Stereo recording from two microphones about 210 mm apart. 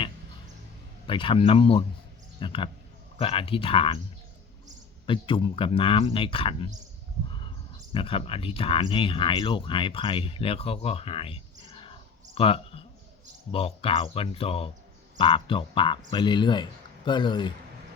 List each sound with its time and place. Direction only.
1.0 s speech: 25° left (ahead or behind)
5.0 s speech: 25° left (ahead or behind)
7.9 s speech: 25° left (ahead or behind)
11.7 s clicking: 25° left (ahead or behind)
13.5 s speech: 25° left (ahead or behind)